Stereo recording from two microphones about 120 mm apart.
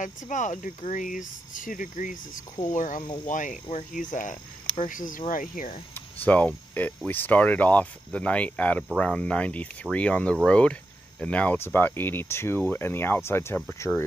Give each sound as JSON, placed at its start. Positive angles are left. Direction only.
{"t": 0.0, "sound": "speech", "side_deg": 90}
{"t": 5.9, "sound": "cricket", "side_deg": 15}
{"t": 7.1, "sound": "speech", "side_deg": 15}